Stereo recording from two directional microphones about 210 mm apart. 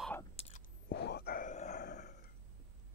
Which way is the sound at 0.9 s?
50° left (ahead or behind).